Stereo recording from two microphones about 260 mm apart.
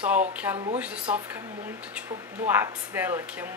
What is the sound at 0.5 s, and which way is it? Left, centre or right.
Speech, right.